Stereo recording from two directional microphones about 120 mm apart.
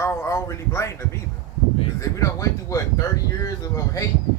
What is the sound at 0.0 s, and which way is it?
Speech, 25° left (ahead or behind).